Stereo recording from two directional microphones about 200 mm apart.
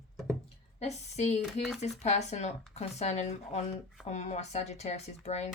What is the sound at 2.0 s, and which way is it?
Speech, 35° left (ahead or behind).